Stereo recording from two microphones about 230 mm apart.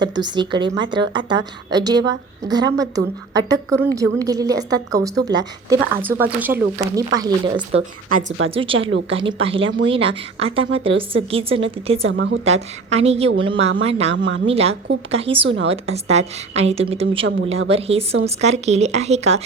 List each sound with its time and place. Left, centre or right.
0.0 s a woman's voice: centre
8.8 s a woman's voice: right
9.0 s a woman's voice: right
9.6 s speech: right
10.4 s a woman's voice: right
12.1 s a woman's voice: right
12.5 s a woman's voice: right
14.3 s speech: right
14.5 s a woman's voice: right
15.4 s speech: right
15.7 s a woman's voice: right